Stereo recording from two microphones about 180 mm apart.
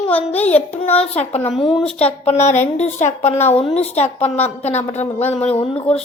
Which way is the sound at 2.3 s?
35° left (ahead or behind).